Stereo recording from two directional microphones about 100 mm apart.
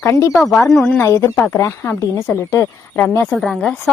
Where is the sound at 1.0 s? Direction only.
30° left (ahead or behind).